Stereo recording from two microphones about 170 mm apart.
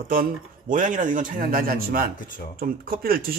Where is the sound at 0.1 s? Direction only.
55° right (ahead or behind).